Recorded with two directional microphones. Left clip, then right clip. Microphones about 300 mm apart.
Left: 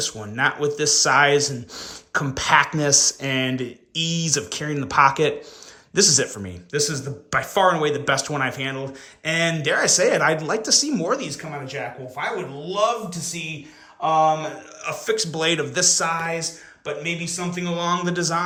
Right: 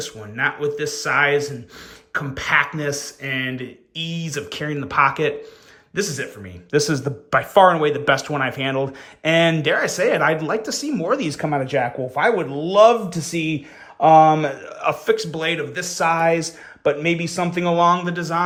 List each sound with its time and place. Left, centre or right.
0.0 s speech: centre
6.7 s speech: centre
11.3 s speech: centre
14.8 s speech: centre
16.0 s speech: centre